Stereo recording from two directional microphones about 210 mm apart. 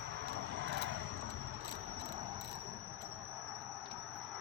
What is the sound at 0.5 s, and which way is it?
Vehicle, 60° right (ahead or behind).